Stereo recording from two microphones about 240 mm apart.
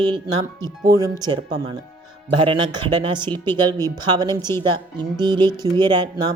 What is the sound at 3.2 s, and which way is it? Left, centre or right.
Speech, centre.